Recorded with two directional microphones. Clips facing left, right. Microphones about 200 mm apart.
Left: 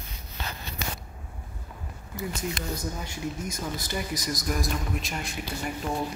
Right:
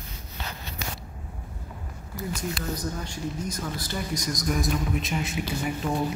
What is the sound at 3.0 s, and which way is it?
A man's voice, 10° left (ahead or behind).